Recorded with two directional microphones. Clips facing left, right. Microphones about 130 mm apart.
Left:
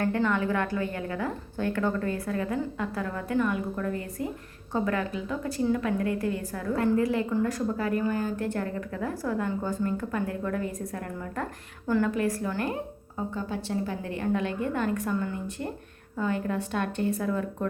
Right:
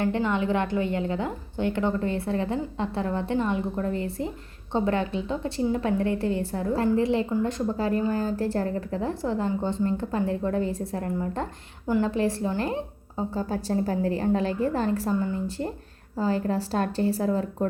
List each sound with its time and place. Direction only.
0.0 s a woman's voice: 20° right (ahead or behind)